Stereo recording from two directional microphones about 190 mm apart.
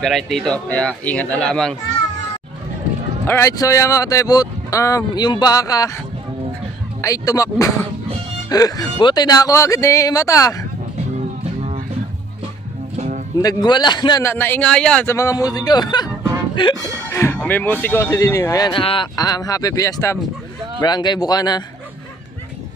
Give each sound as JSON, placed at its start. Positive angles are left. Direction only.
{"t": 0.0, "sound": "speech", "side_deg": 0}
{"t": 3.3, "sound": "speech", "side_deg": 15}
{"t": 7.0, "sound": "a man's voice", "side_deg": 15}
{"t": 12.9, "sound": "music", "side_deg": -35}
{"t": 13.4, "sound": "a man's voice", "side_deg": 20}